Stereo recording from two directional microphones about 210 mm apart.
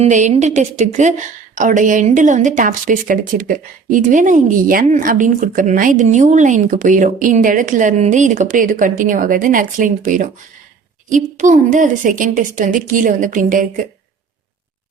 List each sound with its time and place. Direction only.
0.0 s a woman's voice: 35° right (ahead or behind)